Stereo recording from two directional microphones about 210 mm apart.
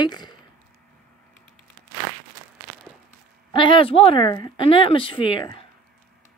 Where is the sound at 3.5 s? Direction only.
25° left (ahead or behind).